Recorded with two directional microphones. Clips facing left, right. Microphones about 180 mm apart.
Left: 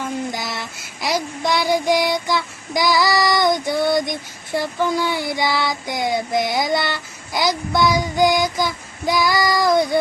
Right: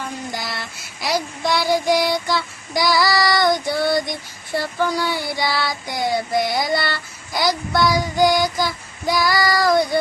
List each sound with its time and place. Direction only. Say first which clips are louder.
0.3 s child singing: left 2 dB; 20° left (ahead or behind)